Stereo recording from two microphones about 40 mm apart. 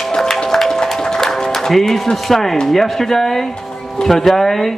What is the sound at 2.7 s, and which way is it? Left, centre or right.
A man's voice, centre.